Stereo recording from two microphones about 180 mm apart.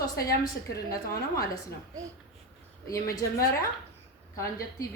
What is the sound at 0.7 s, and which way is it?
Speech, 20° left (ahead or behind).